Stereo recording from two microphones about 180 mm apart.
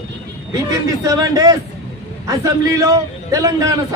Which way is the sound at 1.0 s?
20° right (ahead or behind).